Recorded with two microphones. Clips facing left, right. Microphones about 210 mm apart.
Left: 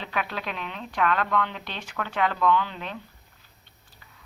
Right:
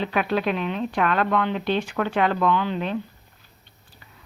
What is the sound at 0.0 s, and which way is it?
Speech, 50° right (ahead or behind).